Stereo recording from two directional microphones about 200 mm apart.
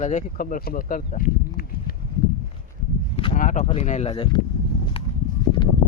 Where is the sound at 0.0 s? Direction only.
40° left (ahead or behind).